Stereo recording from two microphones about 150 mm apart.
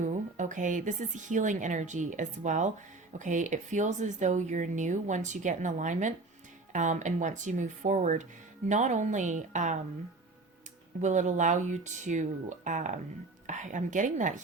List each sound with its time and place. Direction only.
0.0 s a woman's voice: 55° right (ahead or behind)
11.0 s a woman's voice: 55° right (ahead or behind)